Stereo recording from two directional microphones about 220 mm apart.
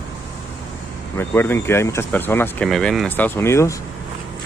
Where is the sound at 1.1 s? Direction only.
10° left (ahead or behind).